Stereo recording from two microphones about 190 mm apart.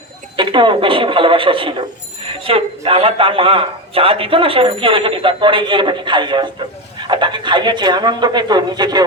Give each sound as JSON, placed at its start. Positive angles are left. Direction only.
{"t": 0.3, "sound": "a man's voice", "side_deg": -25}